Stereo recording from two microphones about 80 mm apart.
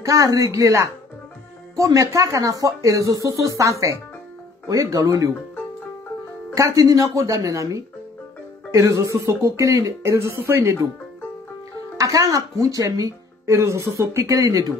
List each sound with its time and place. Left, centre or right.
0.0 s speech: right
6.5 s speech: right
12.0 s speech: right